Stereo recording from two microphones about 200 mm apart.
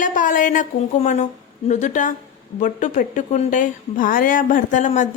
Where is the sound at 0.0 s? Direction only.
40° left (ahead or behind).